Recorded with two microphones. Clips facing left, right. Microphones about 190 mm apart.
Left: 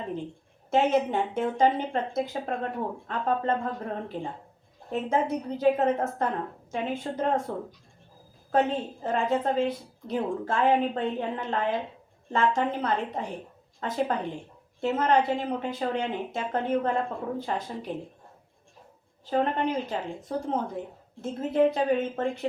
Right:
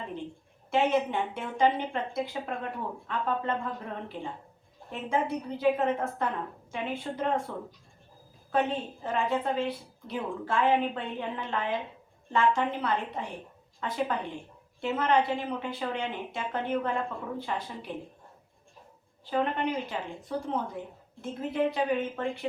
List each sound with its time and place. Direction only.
0.7 s a woman's voice: 40° left (ahead or behind)
8.5 s a woman's voice: 45° left (ahead or behind)
19.3 s a woman's voice: 40° left (ahead or behind)